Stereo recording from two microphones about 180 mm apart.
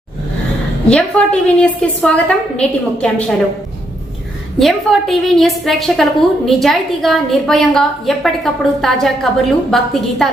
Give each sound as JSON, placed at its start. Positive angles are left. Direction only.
{"t": 0.9, "sound": "a woman's voice", "side_deg": 5}
{"t": 4.6, "sound": "a woman's voice", "side_deg": 0}